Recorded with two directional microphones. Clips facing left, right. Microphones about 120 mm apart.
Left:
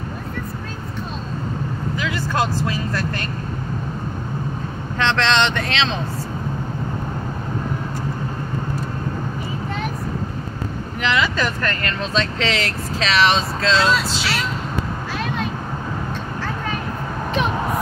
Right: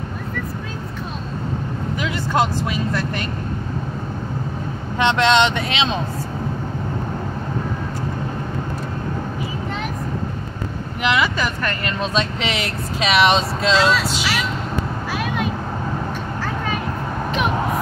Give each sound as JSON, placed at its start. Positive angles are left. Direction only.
{"t": 2.0, "sound": "speech", "side_deg": -20}
{"t": 4.9, "sound": "speech", "side_deg": -10}
{"t": 11.0, "sound": "speech", "side_deg": -15}